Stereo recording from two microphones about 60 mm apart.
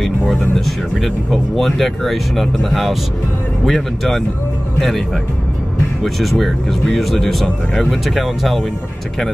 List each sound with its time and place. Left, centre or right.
0.0 s speech: centre
6.0 s speech: centre
7.4 s speech: centre
7.9 s speech: centre